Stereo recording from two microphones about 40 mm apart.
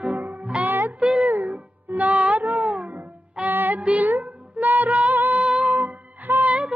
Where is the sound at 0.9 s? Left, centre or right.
Right.